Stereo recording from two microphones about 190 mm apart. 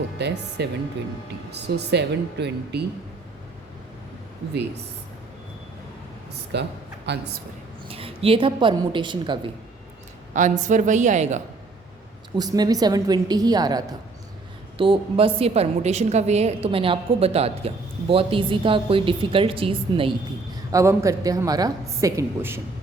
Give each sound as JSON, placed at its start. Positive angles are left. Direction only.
{"t": 0.2, "sound": "speech", "side_deg": -65}
{"t": 6.5, "sound": "a man's voice", "side_deg": -65}
{"t": 7.9, "sound": "a woman's voice", "side_deg": -30}
{"t": 10.3, "sound": "a woman's voice", "side_deg": -40}
{"t": 12.4, "sound": "a woman's voice", "side_deg": -20}
{"t": 20.7, "sound": "a woman's voice", "side_deg": -15}